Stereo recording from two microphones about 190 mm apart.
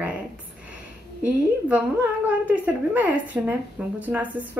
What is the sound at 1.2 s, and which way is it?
Speech, 5° right (ahead or behind).